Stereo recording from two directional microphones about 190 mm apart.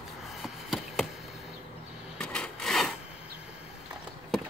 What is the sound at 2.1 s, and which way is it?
Wood, 5° left (ahead or behind).